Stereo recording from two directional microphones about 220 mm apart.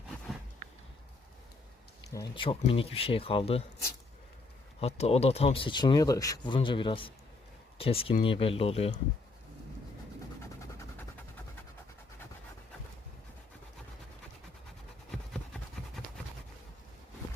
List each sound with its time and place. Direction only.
2.0 s speech: 15° left (ahead or behind)
4.8 s speech: 30° left (ahead or behind)
15.1 s a sound: 5° left (ahead or behind)